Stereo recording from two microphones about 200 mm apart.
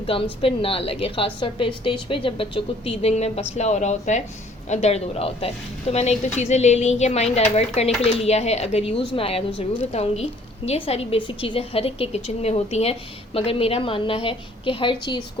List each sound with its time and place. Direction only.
0.1 s a woman's voice: 25° left (ahead or behind)